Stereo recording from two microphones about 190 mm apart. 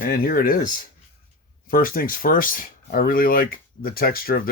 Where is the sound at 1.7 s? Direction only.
50° left (ahead or behind).